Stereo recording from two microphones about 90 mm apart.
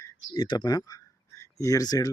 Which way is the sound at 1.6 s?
40° left (ahead or behind).